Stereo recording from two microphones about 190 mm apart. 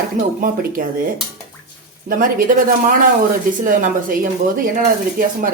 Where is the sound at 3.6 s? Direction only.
45° right (ahead or behind).